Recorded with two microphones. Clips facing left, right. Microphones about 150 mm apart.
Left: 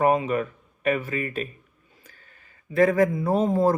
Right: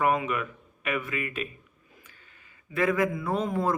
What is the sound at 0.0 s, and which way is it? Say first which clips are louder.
Speech: left 5 dB; 35° left (ahead or behind).